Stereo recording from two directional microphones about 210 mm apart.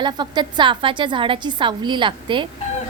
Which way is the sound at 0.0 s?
20° right (ahead or behind).